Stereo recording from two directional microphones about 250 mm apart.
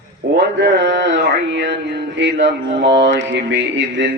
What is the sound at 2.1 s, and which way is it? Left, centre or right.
Mantra, right.